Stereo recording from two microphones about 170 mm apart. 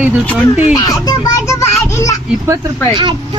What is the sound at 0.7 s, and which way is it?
Children playing, 20° left (ahead or behind).